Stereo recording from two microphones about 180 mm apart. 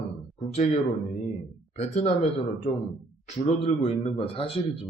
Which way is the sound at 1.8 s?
35° left (ahead or behind).